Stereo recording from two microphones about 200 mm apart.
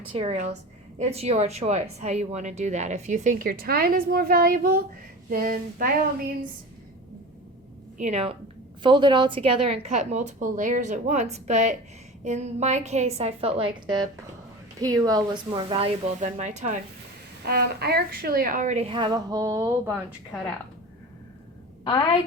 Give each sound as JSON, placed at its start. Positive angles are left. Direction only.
{"t": 0.1, "sound": "speech", "side_deg": -30}
{"t": 7.9, "sound": "speech", "side_deg": -35}
{"t": 17.4, "sound": "speech", "side_deg": -55}
{"t": 21.8, "sound": "a woman's voice", "side_deg": 20}